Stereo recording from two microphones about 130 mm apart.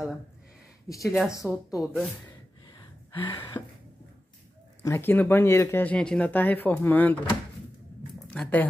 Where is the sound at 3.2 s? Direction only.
35° left (ahead or behind).